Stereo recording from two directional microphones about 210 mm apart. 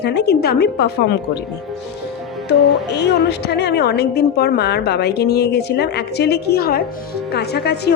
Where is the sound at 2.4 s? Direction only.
55° left (ahead or behind).